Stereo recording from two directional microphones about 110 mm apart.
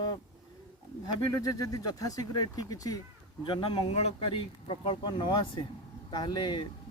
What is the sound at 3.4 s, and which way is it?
Speech, 50° left (ahead or behind).